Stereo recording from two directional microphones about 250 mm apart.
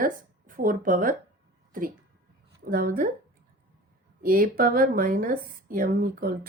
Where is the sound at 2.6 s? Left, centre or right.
Right.